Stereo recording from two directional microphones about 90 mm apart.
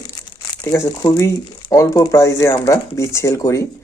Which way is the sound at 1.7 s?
40° left (ahead or behind).